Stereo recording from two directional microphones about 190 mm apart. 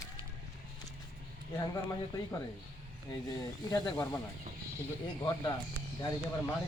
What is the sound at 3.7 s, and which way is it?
Speech, 15° left (ahead or behind).